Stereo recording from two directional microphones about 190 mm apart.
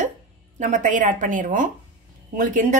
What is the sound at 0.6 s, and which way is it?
Speech, 40° right (ahead or behind).